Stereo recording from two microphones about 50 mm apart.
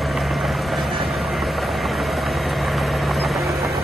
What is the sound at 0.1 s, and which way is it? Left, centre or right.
Vehicle, centre.